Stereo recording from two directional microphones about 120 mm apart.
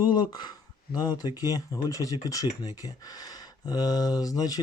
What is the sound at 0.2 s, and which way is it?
Speech, 35° left (ahead or behind).